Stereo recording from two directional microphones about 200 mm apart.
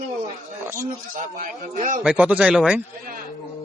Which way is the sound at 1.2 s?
40° right (ahead or behind).